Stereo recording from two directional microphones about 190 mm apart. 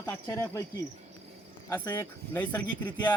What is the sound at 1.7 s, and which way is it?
Speech, 10° left (ahead or behind).